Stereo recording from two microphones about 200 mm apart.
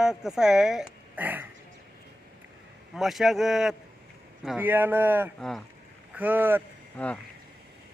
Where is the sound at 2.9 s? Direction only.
Centre (ahead or behind).